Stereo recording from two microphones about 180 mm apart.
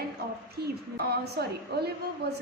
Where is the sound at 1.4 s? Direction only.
60° right (ahead or behind).